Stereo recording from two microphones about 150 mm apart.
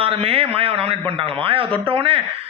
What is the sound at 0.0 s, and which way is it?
A man's voice, 40° right (ahead or behind).